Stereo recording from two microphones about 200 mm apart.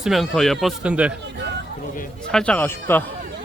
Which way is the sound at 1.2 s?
60° right (ahead or behind).